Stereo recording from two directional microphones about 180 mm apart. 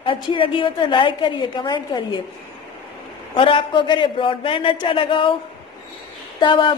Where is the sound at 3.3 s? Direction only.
30° left (ahead or behind).